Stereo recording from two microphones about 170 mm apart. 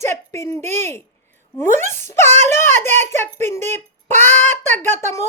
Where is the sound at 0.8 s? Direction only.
15° left (ahead or behind).